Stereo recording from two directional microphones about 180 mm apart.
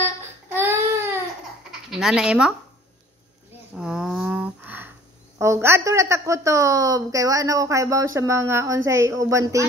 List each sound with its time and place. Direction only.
0.0 s child singing: 10° right (ahead or behind)
1.7 s speech: 5° right (ahead or behind)
3.7 s a sound: 5° right (ahead or behind)
5.4 s a woman's voice: 15° right (ahead or behind)